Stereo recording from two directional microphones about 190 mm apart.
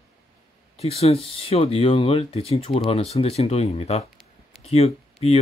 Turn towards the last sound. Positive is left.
turn(degrees=35)  # may be behind; listen again after turning